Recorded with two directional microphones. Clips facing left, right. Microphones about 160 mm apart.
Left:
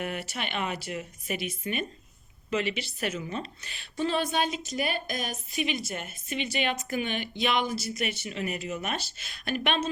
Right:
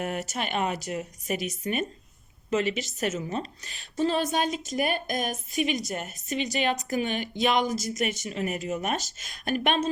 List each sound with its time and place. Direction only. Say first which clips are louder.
0.0 s a woman's voice: right 3 dB; 40° right (ahead or behind)